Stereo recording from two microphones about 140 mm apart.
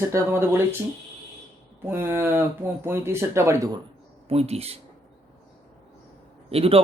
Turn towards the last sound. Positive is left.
turn(degrees=-45)  # may be behind; listen again after turning